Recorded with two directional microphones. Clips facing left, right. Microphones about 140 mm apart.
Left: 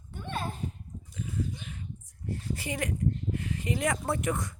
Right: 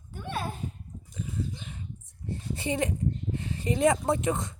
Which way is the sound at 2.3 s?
25° right (ahead or behind).